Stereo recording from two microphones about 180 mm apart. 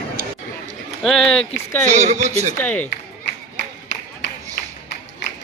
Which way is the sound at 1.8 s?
40° right (ahead or behind).